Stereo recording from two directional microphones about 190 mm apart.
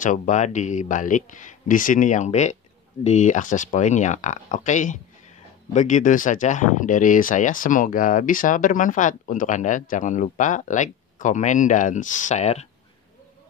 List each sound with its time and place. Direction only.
0.0 s speech: 40° left (ahead or behind)